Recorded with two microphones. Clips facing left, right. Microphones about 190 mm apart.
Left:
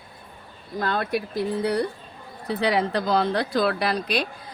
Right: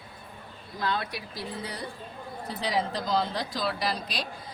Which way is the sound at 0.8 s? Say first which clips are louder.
Left 6 dB; 50° left (ahead or behind).